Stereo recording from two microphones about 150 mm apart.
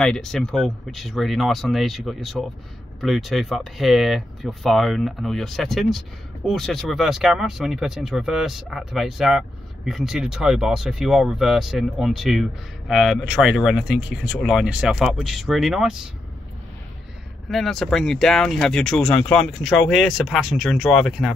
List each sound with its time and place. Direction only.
0.0 s speech: 5° left (ahead or behind)
17.5 s speech: centre (ahead or behind)